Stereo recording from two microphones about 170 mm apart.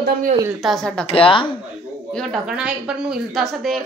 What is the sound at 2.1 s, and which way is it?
Speech, centre (ahead or behind).